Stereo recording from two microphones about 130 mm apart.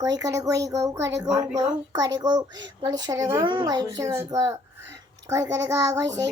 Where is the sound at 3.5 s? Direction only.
35° right (ahead or behind).